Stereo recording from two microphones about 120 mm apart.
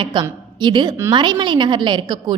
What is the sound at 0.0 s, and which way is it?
A woman's voice, 40° right (ahead or behind).